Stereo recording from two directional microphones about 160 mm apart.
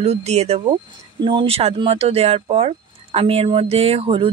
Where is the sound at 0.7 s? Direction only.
30° right (ahead or behind).